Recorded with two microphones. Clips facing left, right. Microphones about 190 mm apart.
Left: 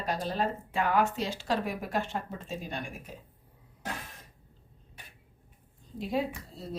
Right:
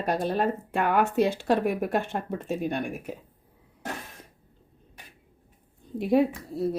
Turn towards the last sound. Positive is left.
turn(degrees=-60)  # may be behind; listen again after turning